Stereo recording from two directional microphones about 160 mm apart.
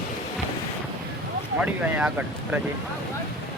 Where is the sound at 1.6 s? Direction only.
10° right (ahead or behind).